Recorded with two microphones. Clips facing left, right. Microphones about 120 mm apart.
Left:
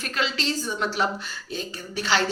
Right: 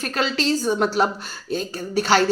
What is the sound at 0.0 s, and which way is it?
A woman's voice, 40° right (ahead or behind).